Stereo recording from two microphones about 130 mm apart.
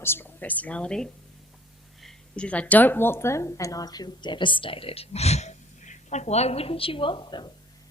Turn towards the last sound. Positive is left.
turn(degrees=35)  # may be behind; listen again after turning